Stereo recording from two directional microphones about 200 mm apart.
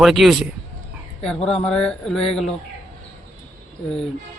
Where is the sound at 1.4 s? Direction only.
5° left (ahead or behind).